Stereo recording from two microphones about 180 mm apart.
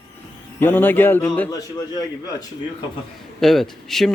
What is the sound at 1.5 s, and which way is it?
Speech, 20° left (ahead or behind).